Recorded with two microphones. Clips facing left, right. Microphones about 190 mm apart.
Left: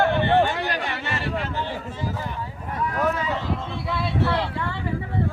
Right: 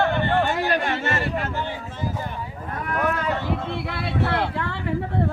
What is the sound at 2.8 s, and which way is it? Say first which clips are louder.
Speech: left 1 dB; 60° right (ahead or behind).